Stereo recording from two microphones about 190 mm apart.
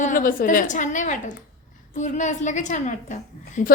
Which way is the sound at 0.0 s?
45° left (ahead or behind).